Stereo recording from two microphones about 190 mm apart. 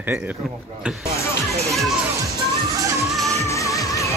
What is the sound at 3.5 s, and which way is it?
Music, 15° left (ahead or behind).